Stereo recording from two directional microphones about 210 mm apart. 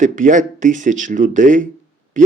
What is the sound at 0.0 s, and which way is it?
Speech, 35° right (ahead or behind).